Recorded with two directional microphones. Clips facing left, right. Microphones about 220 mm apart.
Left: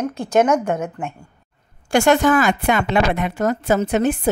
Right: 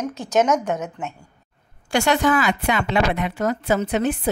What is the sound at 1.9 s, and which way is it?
A woman's voice, 45° left (ahead or behind).